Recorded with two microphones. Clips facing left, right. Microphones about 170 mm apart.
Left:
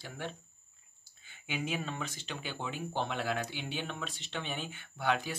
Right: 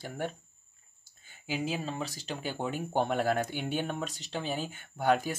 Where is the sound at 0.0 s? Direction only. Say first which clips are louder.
Right 6 dB; 45° right (ahead or behind).